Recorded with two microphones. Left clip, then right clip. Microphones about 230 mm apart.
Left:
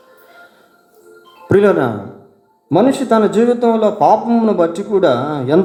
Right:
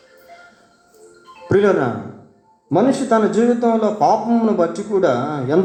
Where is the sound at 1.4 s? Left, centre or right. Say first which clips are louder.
Left 3 dB; left.